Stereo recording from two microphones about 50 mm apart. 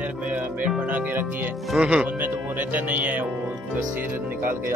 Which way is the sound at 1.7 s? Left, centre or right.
Right.